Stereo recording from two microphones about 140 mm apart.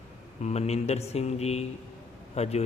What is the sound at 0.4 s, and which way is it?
A man's voice, 50° left (ahead or behind).